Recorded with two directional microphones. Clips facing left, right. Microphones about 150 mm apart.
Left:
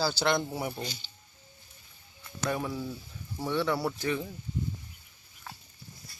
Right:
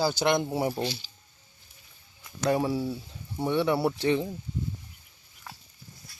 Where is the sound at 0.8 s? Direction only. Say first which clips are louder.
Right 8 dB; 75° right (ahead or behind).